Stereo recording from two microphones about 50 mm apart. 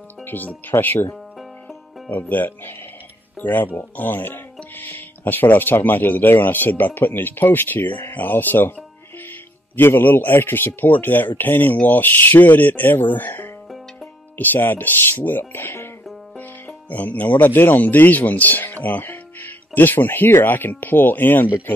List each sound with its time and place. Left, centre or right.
0.3 s speech: left
2.0 s a man's voice: left
9.8 s a man's voice: left
16.3 s speech: left